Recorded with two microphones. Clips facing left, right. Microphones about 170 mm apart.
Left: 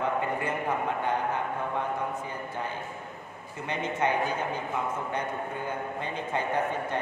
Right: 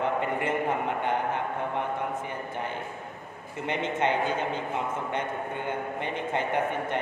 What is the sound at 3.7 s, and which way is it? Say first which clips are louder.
A man's voice: right 1 dB; 20° right (ahead or behind).